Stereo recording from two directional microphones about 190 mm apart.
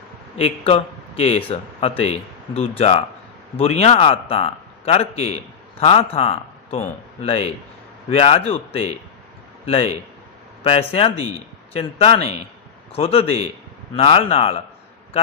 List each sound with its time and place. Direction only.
0.3 s a man's voice: 30° left (ahead or behind)